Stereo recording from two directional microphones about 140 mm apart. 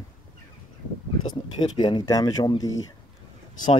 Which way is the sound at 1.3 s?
30° left (ahead or behind).